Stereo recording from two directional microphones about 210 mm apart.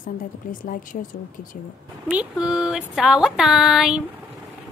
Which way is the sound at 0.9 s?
40° left (ahead or behind).